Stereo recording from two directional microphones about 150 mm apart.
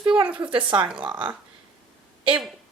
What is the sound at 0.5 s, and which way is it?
Speech, 35° right (ahead or behind).